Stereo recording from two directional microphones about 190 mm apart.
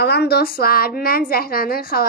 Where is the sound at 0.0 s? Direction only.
60° left (ahead or behind).